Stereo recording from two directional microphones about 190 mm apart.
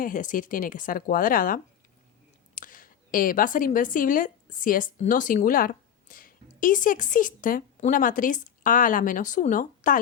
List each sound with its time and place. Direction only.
0.0 s a woman's voice: 45° left (ahead or behind)